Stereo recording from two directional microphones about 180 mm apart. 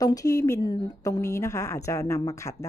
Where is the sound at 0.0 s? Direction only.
20° left (ahead or behind).